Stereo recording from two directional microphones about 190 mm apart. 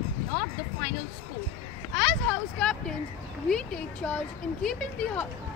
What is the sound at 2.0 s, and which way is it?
Speech, centre (ahead or behind).